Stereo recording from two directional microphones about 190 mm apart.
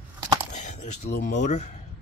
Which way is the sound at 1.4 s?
40° left (ahead or behind).